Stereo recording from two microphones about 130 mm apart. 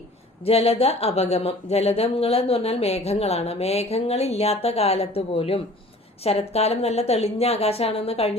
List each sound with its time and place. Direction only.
0.4 s speech: 50° left (ahead or behind)